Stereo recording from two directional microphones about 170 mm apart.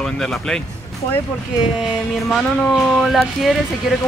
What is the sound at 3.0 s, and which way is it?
Speech, centre (ahead or behind).